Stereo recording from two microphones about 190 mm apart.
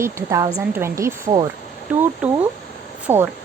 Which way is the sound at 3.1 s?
15° right (ahead or behind).